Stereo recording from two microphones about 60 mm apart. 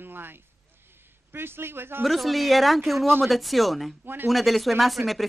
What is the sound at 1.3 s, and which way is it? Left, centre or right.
Speech, right.